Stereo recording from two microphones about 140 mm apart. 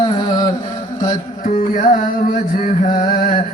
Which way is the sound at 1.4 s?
65° left (ahead or behind).